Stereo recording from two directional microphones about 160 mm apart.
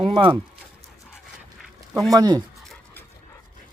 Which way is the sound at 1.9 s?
Centre (ahead or behind).